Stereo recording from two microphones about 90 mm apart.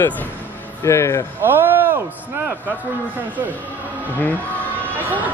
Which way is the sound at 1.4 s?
25° right (ahead or behind).